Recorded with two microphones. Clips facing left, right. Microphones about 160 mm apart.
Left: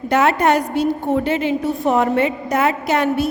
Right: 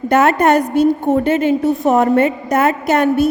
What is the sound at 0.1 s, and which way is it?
A woman's voice, 50° right (ahead or behind).